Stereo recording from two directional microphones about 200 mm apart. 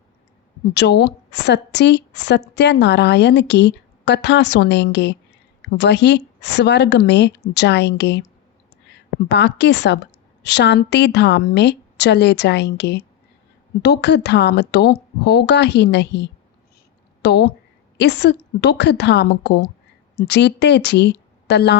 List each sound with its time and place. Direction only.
0.7 s a woman's voice: 55° left (ahead or behind)
9.3 s a woman's voice: 60° left (ahead or behind)